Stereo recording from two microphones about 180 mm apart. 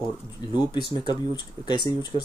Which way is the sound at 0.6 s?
25° left (ahead or behind).